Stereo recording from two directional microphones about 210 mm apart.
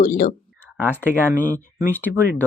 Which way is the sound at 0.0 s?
40° left (ahead or behind).